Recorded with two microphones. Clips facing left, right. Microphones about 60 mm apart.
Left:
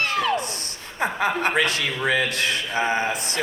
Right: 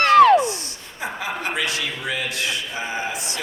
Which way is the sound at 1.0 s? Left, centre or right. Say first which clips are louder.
Left 5 dB; left.